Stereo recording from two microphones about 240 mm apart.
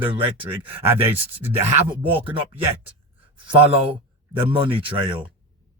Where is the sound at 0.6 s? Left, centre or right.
Centre.